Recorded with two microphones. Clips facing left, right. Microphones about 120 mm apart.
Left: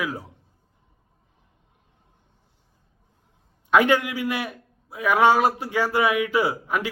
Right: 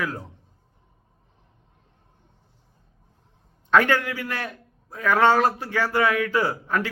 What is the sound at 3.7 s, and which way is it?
A man's voice, 15° left (ahead or behind).